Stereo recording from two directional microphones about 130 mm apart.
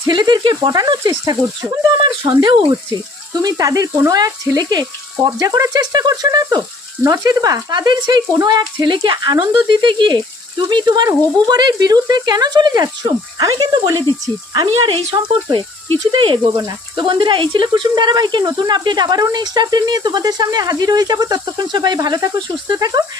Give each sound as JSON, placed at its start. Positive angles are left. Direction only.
{"t": 0.1, "sound": "speech", "side_deg": -35}